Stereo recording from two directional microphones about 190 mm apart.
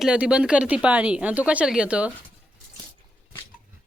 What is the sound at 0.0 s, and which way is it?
Speech, 5° right (ahead or behind).